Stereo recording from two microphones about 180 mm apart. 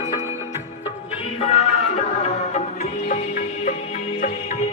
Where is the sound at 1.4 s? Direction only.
35° left (ahead or behind).